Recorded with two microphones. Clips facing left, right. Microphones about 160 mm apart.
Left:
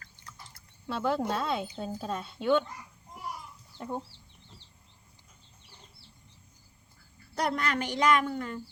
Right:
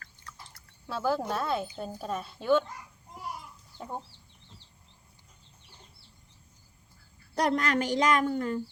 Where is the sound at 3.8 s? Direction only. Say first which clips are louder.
Left 3 dB; centre (ahead or behind).